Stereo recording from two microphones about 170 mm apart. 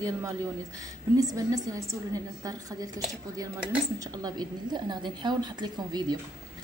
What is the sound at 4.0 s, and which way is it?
A woman's voice, 20° right (ahead or behind).